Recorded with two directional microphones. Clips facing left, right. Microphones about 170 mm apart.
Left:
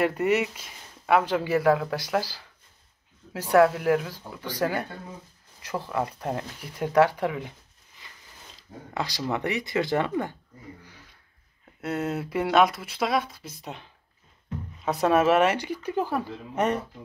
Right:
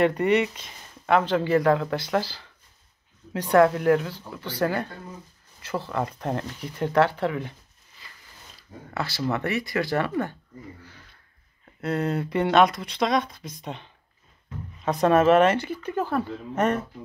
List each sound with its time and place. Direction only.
0.0 s speech: 5° left (ahead or behind)
8.0 s biting: 20° left (ahead or behind)
8.9 s speech: 15° left (ahead or behind)
10.8 s a sound: 10° left (ahead or behind)
11.8 s speech: 5° left (ahead or behind)
14.9 s speech: 5° left (ahead or behind)